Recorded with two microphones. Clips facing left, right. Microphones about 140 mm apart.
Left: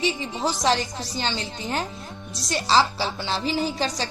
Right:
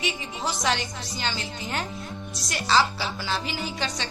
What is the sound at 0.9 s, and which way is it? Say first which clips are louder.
Speech: left 3 dB; 30° left (ahead or behind).